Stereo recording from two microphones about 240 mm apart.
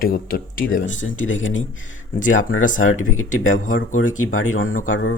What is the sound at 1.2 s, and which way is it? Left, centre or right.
Speech, left.